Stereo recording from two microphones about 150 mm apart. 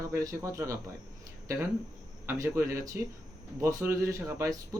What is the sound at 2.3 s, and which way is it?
Speech, 15° right (ahead or behind).